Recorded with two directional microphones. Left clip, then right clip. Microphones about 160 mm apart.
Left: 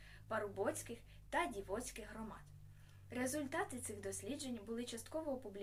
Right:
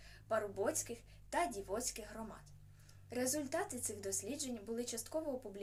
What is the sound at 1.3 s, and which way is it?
Speech, 20° left (ahead or behind).